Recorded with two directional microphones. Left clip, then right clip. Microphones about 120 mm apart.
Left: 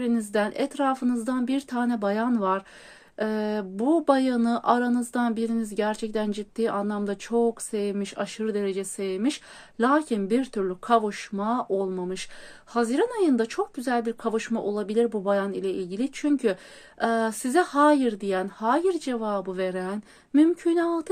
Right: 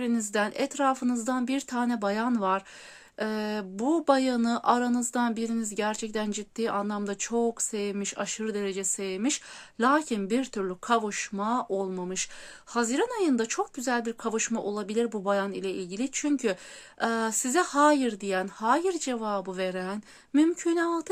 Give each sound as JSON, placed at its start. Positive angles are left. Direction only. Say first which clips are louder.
{"t": 0.0, "sound": "speech", "louder": "left 2 dB", "side_deg": -20}